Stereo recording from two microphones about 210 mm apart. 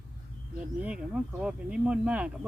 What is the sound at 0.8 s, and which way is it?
A woman's voice, 5° right (ahead or behind).